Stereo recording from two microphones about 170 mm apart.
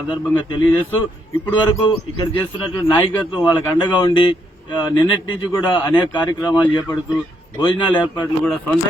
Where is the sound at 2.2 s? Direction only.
25° left (ahead or behind).